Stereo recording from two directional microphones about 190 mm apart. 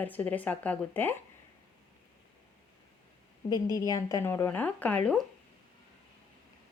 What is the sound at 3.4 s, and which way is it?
A woman's voice, 20° left (ahead or behind).